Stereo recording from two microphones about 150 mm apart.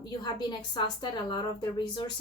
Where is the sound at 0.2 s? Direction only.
30° left (ahead or behind).